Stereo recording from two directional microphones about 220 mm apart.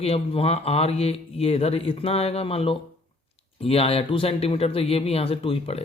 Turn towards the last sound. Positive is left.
turn(degrees=25)  # may be behind; listen again after turning